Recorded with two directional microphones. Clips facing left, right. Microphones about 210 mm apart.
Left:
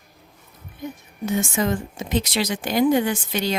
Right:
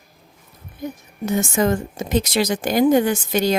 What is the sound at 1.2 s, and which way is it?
Speech, 45° right (ahead or behind).